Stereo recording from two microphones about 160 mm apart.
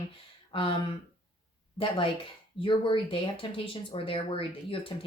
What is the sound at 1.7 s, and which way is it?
Speech, 35° left (ahead or behind).